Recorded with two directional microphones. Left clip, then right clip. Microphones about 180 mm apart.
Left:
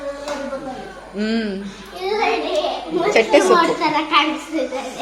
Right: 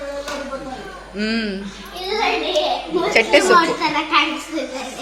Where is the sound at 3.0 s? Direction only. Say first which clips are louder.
Even; 10° left (ahead or behind).